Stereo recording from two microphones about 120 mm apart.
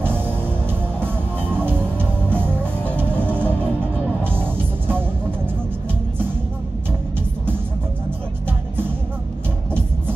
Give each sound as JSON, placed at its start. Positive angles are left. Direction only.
{"t": 0.7, "sound": "music", "side_deg": -15}